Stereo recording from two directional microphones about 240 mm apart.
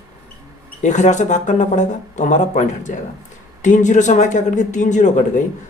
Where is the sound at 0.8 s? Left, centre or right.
Left.